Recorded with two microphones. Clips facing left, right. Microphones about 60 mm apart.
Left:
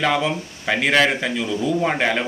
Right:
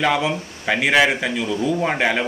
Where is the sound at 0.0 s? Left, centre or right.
Centre.